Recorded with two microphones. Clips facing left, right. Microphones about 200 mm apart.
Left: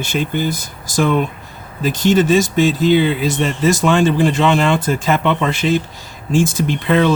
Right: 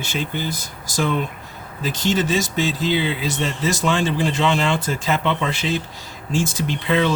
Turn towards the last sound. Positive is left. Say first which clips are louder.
# left 5 dB
turn(degrees=50)  # may be behind; listen again after turning